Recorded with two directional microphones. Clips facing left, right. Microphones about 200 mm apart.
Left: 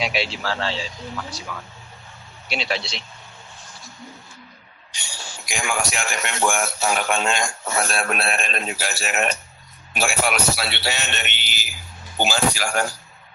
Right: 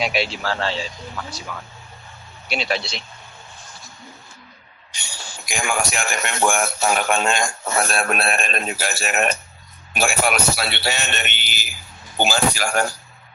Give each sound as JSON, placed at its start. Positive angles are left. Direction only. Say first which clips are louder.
{"t": 0.0, "sound": "speech", "louder": "right 2 dB", "side_deg": -50}
{"t": 5.5, "sound": "speech", "louder": "right 2 dB", "side_deg": -55}